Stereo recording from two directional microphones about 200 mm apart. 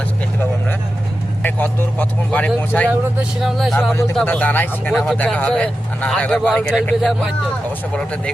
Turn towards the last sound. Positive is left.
turn(degrees=0)  # may be behind; listen again after turning